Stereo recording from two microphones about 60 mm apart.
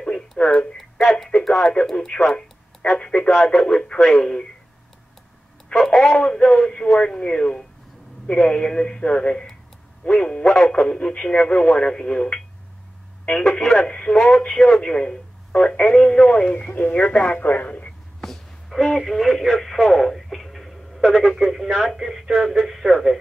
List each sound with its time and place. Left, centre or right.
0.4 s tick-tock: centre
0.7 s a sound: centre
1.5 s speech: centre
5.8 s speech: centre; by 17.9 s left
18.2 s radio: centre
21.0 s speech: centre